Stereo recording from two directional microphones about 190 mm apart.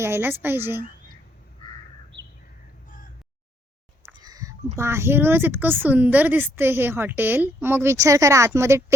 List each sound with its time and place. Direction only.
0.0 s a woman's voice: 10° right (ahead or behind)
4.1 s a sound: 20° right (ahead or behind)
4.8 s a woman's voice: 15° right (ahead or behind)